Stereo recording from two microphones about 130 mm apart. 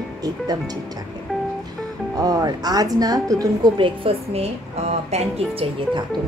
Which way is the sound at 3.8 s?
45° right (ahead or behind).